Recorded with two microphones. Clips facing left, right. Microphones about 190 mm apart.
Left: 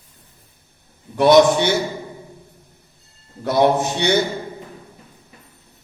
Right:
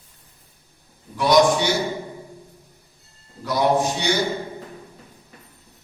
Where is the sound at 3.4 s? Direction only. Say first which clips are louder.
Left 3 dB; 55° left (ahead or behind).